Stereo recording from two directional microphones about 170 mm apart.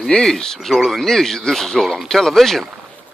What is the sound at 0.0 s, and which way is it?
Speech, 5° left (ahead or behind).